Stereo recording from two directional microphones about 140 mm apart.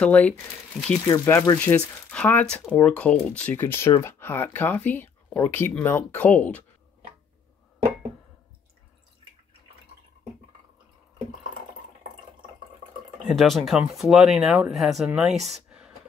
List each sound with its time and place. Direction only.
0.0 s speech: 10° left (ahead or behind)
13.3 s speech: centre (ahead or behind)